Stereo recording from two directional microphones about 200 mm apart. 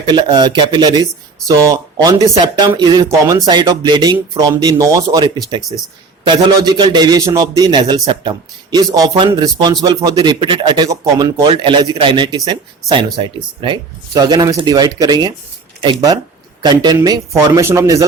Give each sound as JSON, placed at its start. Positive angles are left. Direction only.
{"t": 0.0, "sound": "a man's voice", "side_deg": -20}